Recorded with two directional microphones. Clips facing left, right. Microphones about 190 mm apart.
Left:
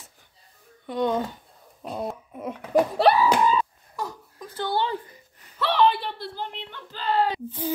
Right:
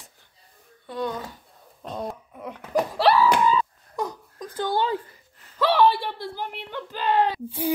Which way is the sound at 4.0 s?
15° right (ahead or behind).